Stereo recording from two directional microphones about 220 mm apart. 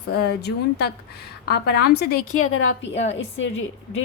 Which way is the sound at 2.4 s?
70° left (ahead or behind).